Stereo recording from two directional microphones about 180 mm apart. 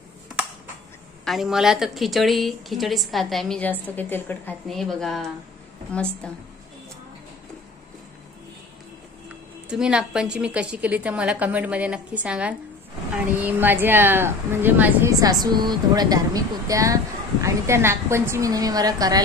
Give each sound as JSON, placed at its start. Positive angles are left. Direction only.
{"t": 1.2, "sound": "a woman's voice", "side_deg": 0}
{"t": 9.7, "sound": "a woman's voice", "side_deg": -5}